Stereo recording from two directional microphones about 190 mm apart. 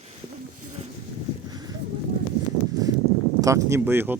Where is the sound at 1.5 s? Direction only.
20° right (ahead or behind).